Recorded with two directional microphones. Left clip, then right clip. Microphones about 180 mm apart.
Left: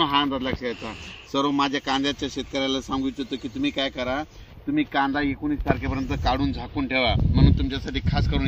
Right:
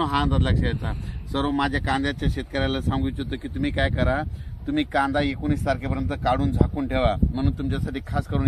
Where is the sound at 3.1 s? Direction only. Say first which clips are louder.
Left 1 dB; 5° right (ahead or behind).